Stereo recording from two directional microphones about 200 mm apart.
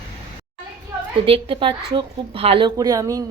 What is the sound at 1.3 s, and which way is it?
A woman's voice, 25° right (ahead or behind).